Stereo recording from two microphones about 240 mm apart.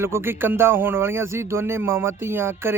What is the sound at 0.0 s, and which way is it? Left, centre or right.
Speech, centre.